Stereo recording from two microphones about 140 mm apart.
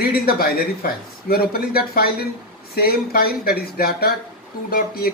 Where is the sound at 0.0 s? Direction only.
90° left.